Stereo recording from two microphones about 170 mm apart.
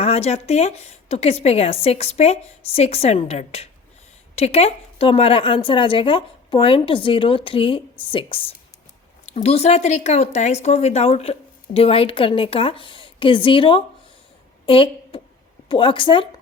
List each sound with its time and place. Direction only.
0.0 s speech: 35° left (ahead or behind)